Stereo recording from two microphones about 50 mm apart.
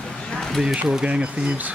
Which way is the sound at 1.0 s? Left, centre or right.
Right.